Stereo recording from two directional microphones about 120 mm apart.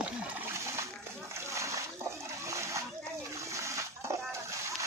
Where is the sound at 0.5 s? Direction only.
20° right (ahead or behind).